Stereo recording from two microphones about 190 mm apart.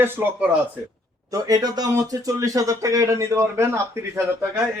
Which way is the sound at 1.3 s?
20° right (ahead or behind).